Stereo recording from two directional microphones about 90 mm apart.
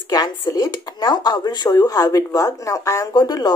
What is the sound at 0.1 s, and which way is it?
Speech, 45° left (ahead or behind).